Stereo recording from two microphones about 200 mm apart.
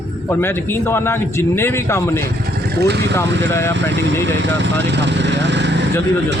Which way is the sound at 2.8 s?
55° right (ahead or behind).